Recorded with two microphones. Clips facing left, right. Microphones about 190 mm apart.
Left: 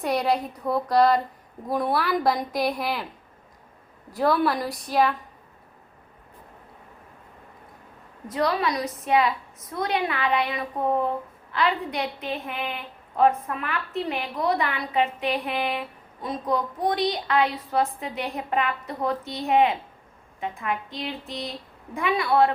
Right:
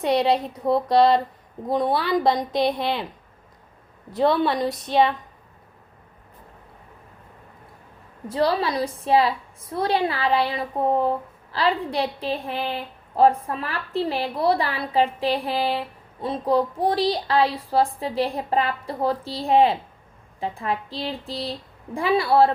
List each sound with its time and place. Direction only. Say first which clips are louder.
0.1 s a woman's voice: right 4 dB; 25° right (ahead or behind)
4.1 s a woman's voice: right 2 dB; 25° right (ahead or behind)
8.3 s a woman's voice: right 2 dB; 30° right (ahead or behind)